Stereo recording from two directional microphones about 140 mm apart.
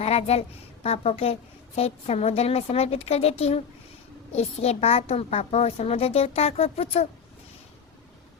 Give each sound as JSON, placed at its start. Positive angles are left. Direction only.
{"t": 0.0, "sound": "a woman's voice", "side_deg": 45}